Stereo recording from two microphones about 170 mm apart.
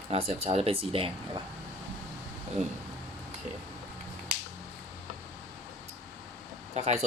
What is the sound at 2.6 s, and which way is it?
Speech, 40° right (ahead or behind).